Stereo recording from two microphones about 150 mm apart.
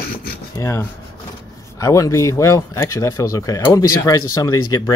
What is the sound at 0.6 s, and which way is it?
Speech, 20° left (ahead or behind).